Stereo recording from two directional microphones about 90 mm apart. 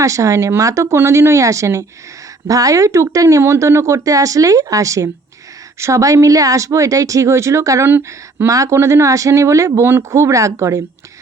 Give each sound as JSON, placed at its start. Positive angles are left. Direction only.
{"t": 0.0, "sound": "speech", "side_deg": -35}
{"t": 7.9, "sound": "speech", "side_deg": -20}
{"t": 8.4, "sound": "speech", "side_deg": -40}